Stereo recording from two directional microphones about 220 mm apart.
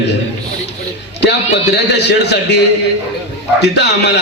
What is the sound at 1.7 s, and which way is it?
A man's voice, 50° left (ahead or behind).